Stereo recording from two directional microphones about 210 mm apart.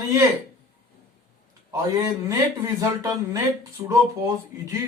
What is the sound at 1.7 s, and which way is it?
Speech, 15° right (ahead or behind).